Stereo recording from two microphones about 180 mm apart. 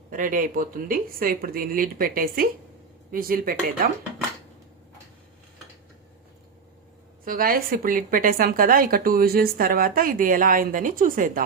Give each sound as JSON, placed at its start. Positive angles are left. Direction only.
{"t": 0.1, "sound": "speech", "side_deg": -50}
{"t": 7.3, "sound": "speech", "side_deg": -55}